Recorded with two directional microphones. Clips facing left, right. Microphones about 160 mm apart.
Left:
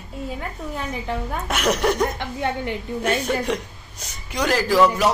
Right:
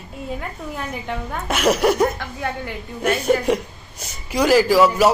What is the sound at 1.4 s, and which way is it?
Speech, 5° right (ahead or behind).